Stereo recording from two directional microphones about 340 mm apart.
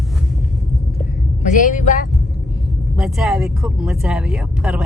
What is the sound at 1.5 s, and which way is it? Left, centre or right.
Speech, left.